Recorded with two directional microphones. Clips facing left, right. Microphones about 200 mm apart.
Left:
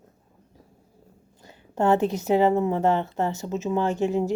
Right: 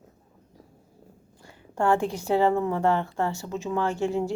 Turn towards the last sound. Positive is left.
turn(degrees=20)  # may be behind; listen again after turning